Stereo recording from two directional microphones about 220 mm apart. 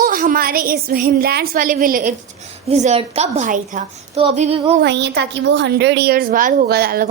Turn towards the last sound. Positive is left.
turn(degrees=-45)  # may be behind; listen again after turning